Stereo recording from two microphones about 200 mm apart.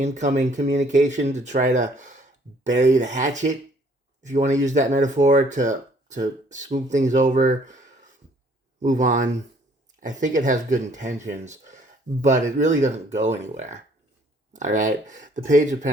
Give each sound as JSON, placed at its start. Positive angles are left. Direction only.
{"t": 0.0, "sound": "speech", "side_deg": -35}